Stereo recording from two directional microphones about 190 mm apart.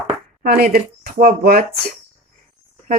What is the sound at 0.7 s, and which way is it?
Speech, 50° right (ahead or behind).